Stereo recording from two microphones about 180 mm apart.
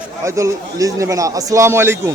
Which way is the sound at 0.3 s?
15° right (ahead or behind).